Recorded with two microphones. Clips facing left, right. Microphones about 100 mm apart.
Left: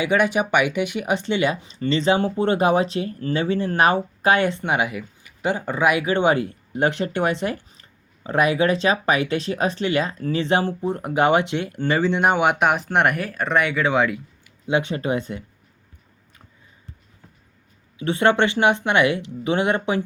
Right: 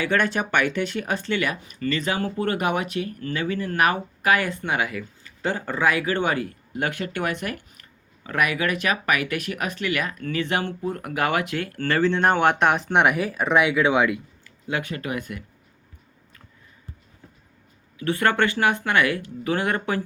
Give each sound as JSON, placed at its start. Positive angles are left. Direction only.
{"t": 0.0, "sound": "speech", "side_deg": 15}
{"t": 14.4, "sound": "speech", "side_deg": 20}
{"t": 18.0, "sound": "speech", "side_deg": 20}